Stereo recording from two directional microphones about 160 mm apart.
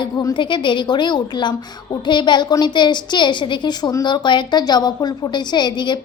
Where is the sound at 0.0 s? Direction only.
25° left (ahead or behind).